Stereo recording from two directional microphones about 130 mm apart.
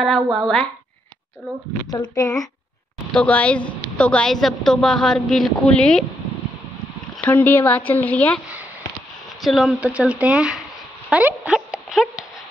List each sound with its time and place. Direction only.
0.0 s a woman's voice: centre (ahead or behind)
1.9 s a child's voice: 25° left (ahead or behind)
3.1 s a woman's voice: 10° left (ahead or behind)
7.2 s speech: 15° left (ahead or behind)
9.4 s speech: centre (ahead or behind)
11.1 s a sound: 10° right (ahead or behind)